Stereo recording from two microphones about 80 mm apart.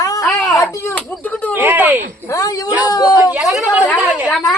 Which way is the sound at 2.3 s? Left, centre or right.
Left.